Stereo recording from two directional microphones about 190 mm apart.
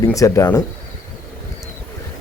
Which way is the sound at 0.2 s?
15° left (ahead or behind).